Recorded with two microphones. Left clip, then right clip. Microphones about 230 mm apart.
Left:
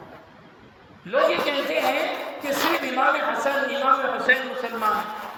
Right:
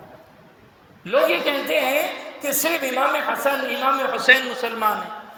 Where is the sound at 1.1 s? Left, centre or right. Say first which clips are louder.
Right 2 dB; right.